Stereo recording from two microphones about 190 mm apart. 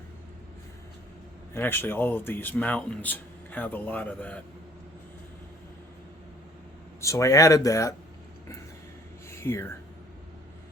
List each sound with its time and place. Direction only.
1.5 s speech: 10° left (ahead or behind)
7.0 s speech: 15° left (ahead or behind)
9.3 s speech: 15° left (ahead or behind)